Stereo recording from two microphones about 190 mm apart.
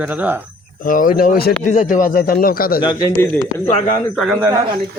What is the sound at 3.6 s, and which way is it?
Speech, 40° left (ahead or behind).